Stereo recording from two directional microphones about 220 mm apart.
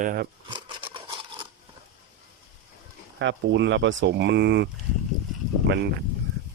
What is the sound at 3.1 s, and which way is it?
Speech, 55° right (ahead or behind).